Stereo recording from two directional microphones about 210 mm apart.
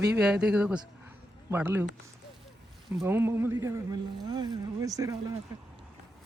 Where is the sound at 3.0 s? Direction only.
10° right (ahead or behind).